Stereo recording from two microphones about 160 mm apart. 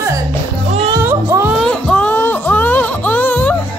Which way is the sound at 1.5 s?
5° left (ahead or behind).